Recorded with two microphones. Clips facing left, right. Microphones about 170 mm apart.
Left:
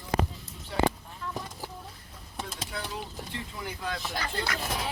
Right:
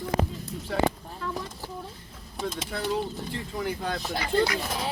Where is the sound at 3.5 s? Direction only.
45° right (ahead or behind).